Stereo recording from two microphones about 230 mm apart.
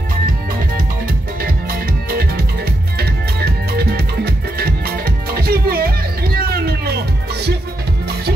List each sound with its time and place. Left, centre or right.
1.4 s music: right